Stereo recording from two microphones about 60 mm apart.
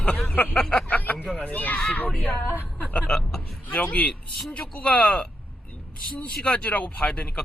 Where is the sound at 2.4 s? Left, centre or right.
Left.